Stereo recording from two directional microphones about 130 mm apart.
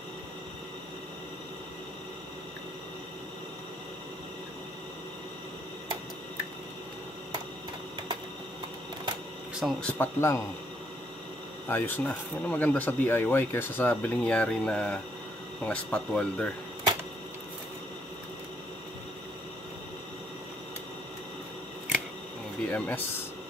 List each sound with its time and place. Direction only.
9.6 s speech: centre (ahead or behind)
9.8 s speech: 20° left (ahead or behind)
11.6 s speech: 15° left (ahead or behind)
22.7 s speech: 10° left (ahead or behind)